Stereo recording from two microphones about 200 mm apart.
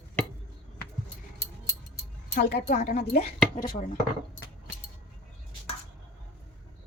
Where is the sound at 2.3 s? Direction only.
45° left (ahead or behind).